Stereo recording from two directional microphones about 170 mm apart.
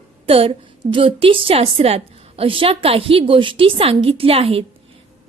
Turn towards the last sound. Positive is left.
turn(degrees=-35)  # may be behind; listen again after turning